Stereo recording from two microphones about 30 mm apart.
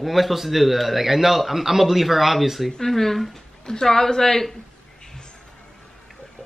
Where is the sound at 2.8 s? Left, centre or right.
Centre.